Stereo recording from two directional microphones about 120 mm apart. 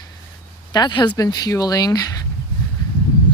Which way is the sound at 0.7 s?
35° left (ahead or behind).